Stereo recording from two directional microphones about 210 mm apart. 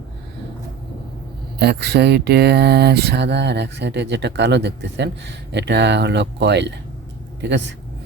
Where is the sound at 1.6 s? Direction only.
50° right (ahead or behind).